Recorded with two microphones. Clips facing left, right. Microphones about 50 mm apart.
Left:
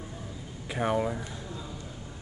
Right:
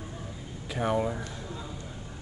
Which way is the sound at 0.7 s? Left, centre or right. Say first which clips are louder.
Even; centre.